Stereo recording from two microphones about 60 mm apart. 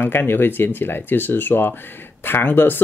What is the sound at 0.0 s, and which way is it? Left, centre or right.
Speech, left.